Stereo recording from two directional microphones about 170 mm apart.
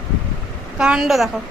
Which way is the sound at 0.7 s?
5° right (ahead or behind).